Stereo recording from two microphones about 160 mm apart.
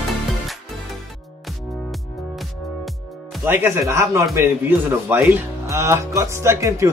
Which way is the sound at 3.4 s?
15° right (ahead or behind).